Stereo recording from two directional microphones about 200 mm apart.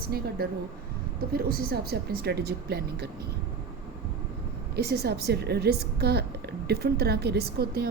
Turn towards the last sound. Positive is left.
turn(degrees=-55)  # may be behind; listen again after turning